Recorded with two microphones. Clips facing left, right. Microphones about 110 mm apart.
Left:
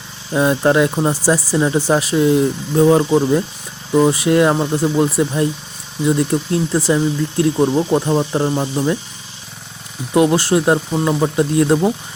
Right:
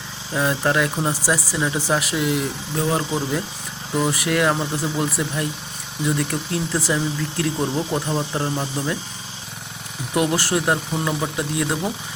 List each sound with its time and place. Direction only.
0.3 s speech: 20° left (ahead or behind)
10.2 s speech: 25° left (ahead or behind)